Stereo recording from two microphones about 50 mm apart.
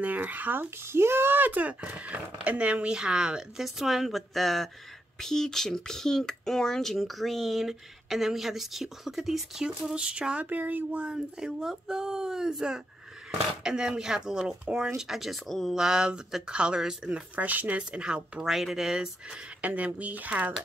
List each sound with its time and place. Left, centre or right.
0.0 s speech: right; by 9.7 s centre
9.7 s speech: centre
10.4 s speech: right
11.0 s speech: centre
15.0 s speech: centre
17.4 s speech: right
18.4 s speech: centre
19.6 s speech: right